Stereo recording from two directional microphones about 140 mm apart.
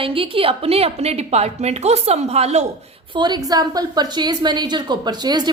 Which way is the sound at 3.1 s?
30° right (ahead or behind).